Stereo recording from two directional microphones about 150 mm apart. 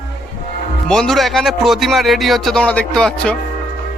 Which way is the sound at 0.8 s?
5° left (ahead or behind).